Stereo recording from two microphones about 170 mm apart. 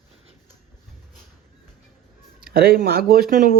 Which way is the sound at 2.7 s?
60° right (ahead or behind).